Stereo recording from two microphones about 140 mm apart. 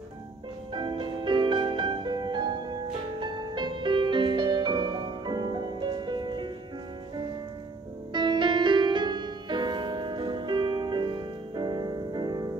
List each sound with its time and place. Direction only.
0.7 s music: 35° right (ahead or behind)
8.1 s music: 35° right (ahead or behind)